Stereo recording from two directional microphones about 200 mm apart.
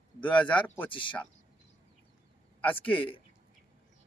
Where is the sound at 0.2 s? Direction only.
5° left (ahead or behind).